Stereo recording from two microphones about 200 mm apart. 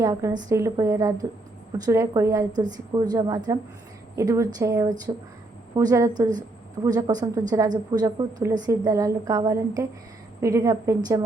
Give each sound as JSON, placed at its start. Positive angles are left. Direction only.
{"t": 0.0, "sound": "a woman's voice", "side_deg": -15}